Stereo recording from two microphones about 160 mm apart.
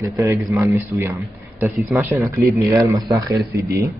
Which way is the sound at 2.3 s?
20° right (ahead or behind).